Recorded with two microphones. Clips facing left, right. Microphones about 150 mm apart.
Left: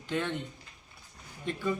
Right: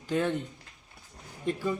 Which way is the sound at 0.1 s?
40° right (ahead or behind).